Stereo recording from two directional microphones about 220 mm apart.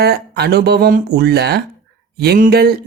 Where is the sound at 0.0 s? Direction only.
45° right (ahead or behind).